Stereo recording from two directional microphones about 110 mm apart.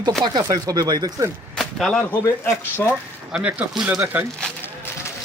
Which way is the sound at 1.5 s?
5° left (ahead or behind).